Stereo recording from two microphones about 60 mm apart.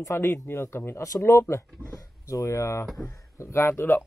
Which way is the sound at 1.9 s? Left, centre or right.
Left.